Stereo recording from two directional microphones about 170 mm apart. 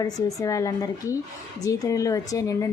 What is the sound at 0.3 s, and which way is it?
A woman's voice, 20° left (ahead or behind).